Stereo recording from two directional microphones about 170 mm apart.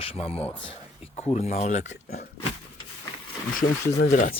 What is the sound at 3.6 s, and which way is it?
Speech, 50° left (ahead or behind).